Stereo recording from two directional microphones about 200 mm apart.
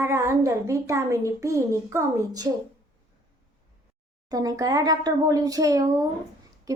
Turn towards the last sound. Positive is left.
turn(degrees=-15)  # may be behind; listen again after turning